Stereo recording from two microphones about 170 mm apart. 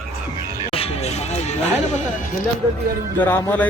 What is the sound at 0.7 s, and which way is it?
Music, 35° left (ahead or behind).